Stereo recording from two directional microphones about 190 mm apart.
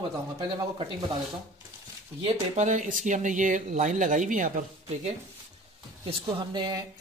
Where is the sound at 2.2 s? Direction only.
35° right (ahead or behind).